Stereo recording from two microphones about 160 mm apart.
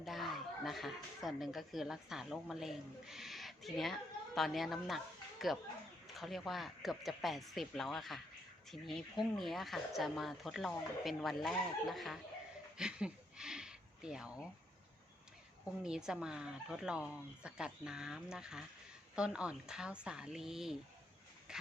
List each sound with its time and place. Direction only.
0.0 s speech: centre (ahead or behind)
12.7 s a sound: 5° right (ahead or behind)
15.8 s speech: 5° right (ahead or behind)
21.5 s shuffle: 5° right (ahead or behind)